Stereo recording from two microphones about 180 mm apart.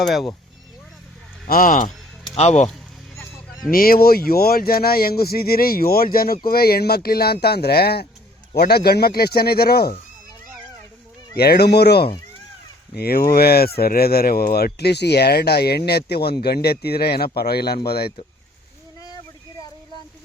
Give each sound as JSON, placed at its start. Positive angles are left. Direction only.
{"t": 0.0, "sound": "speech", "side_deg": 0}
{"t": 1.5, "sound": "speech", "side_deg": 50}
{"t": 2.3, "sound": "speech", "side_deg": 35}
{"t": 3.7, "sound": "speech", "side_deg": 55}
{"t": 11.3, "sound": "speech", "side_deg": 60}
{"t": 18.9, "sound": "a sound", "side_deg": 20}